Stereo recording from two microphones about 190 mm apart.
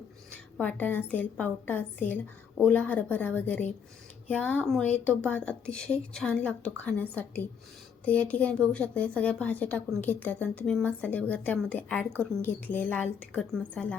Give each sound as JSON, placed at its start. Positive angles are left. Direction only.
{"t": 0.6, "sound": "speech", "side_deg": 10}